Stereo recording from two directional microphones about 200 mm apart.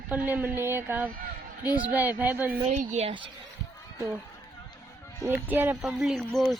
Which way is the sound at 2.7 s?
35° right (ahead or behind).